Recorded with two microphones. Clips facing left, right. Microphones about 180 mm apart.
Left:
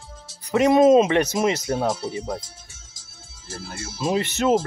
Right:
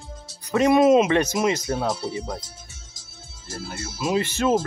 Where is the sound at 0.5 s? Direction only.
20° left (ahead or behind).